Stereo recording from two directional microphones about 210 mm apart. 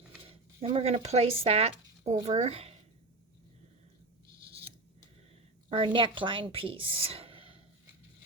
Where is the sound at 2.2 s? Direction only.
30° right (ahead or behind).